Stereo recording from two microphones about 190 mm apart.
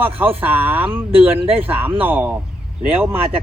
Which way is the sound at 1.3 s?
30° right (ahead or behind).